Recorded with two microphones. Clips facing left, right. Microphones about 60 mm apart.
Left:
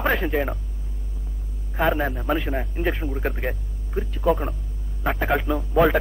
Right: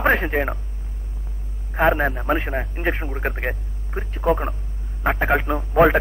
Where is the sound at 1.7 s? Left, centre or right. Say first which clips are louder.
Right 4 dB; right.